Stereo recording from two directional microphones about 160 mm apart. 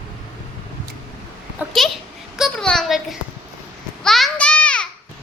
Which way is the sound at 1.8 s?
Centre (ahead or behind).